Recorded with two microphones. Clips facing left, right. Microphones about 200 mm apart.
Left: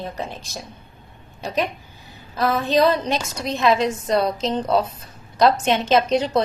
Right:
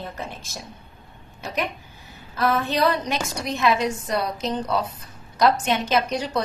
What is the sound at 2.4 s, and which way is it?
A woman's voice, 15° left (ahead or behind).